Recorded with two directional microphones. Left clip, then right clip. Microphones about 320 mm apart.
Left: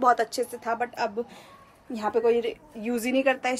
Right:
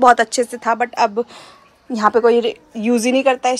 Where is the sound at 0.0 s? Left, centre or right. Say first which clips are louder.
Right 10 dB; right.